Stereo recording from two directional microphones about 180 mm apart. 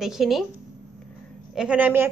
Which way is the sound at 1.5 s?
5° right (ahead or behind).